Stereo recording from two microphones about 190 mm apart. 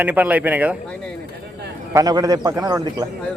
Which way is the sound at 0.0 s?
10° right (ahead or behind).